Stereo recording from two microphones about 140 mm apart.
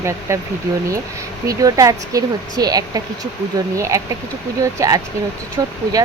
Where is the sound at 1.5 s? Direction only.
25° right (ahead or behind).